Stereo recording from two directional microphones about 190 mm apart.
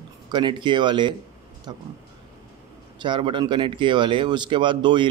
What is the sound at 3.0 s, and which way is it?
A man's voice, 25° right (ahead or behind).